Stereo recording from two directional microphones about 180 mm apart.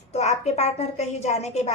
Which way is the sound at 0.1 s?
35° left (ahead or behind).